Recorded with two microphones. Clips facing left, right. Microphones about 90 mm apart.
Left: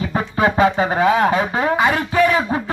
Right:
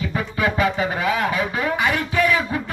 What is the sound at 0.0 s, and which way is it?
Speech, 35° left (ahead or behind).